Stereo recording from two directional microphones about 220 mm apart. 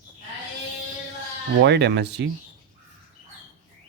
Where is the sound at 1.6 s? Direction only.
50° right (ahead or behind).